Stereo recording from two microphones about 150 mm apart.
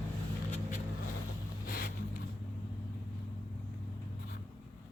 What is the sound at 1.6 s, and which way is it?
Vehicle, 75° left (ahead or behind).